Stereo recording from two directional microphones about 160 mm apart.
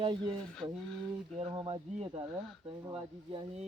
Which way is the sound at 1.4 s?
35° right (ahead or behind).